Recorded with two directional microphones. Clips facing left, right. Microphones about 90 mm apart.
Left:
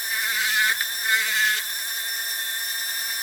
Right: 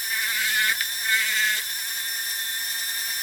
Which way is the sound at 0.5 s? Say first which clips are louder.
Left 2 dB; 25° left (ahead or behind).